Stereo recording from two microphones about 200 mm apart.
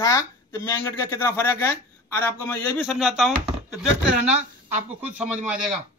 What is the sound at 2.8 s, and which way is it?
Speech, centre (ahead or behind).